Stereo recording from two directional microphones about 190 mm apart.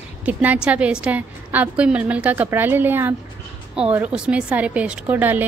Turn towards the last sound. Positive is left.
turn(degrees=-10)  # may be behind; listen again after turning